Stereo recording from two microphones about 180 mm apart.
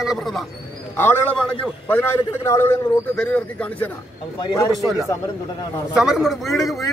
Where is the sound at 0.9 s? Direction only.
10° left (ahead or behind).